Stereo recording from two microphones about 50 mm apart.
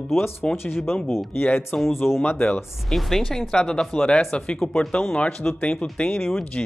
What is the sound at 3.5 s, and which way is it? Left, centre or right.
Speech, centre.